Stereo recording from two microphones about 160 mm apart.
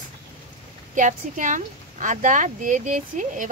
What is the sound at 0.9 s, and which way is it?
Speech, 55° right (ahead or behind).